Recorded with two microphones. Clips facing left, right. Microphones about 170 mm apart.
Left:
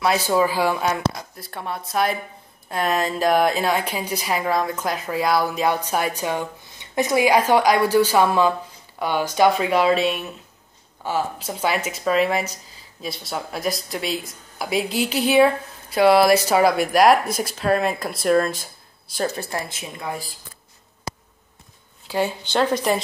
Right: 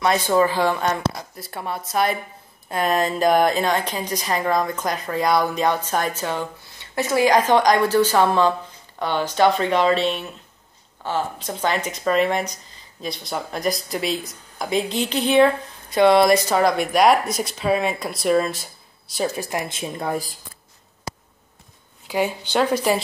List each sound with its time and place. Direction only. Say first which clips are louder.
0.0 s a woman's voice: right 1 dB; 5° left (ahead or behind); by 19.9 s 20° right (ahead or behind)
20.0 s speech: right 4 dB; 45° right (ahead or behind)
22.0 s speech: right 1 dB; 15° right (ahead or behind)